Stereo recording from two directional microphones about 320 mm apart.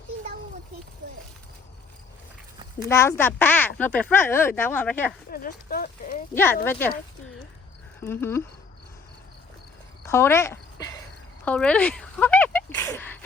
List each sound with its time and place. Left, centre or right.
2.8 s speech: centre
5.3 s speech: left
6.3 s speech: centre
8.0 s speech: centre
10.1 s a sound: centre
11.4 s speech: centre